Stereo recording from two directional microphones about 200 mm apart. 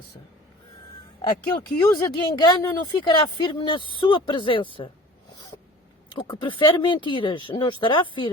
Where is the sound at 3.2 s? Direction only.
25° left (ahead or behind).